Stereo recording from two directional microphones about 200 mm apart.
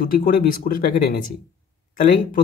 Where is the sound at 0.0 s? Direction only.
45° left (ahead or behind).